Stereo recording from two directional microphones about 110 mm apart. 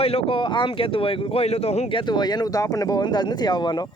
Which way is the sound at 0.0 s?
65° left (ahead or behind).